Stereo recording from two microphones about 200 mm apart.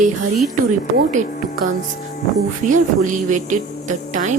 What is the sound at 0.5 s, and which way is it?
Speech, 40° right (ahead or behind).